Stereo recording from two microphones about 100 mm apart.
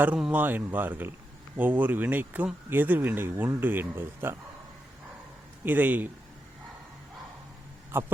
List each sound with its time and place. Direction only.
0.0 s speech: 15° right (ahead or behind)
5.6 s speech: 15° right (ahead or behind)
7.9 s speech: 20° right (ahead or behind)